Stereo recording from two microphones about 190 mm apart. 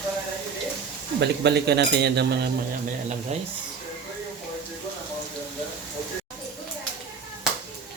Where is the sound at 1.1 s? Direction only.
65° right (ahead or behind).